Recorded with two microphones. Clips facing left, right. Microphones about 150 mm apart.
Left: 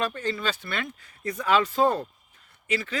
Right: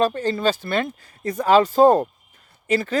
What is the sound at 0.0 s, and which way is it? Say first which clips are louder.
Speech: right 8 dB; 35° right (ahead or behind).